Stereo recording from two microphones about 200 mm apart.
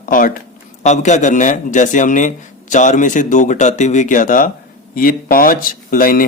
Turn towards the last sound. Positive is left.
turn(degrees=45)  # may be behind; listen again after turning